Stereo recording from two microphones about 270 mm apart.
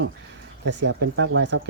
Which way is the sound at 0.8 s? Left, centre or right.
Right.